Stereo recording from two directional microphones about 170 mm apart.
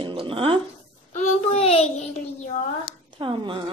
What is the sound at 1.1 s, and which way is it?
Speech, 35° left (ahead or behind).